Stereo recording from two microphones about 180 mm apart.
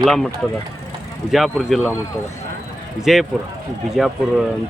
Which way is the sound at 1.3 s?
Centre (ahead or behind).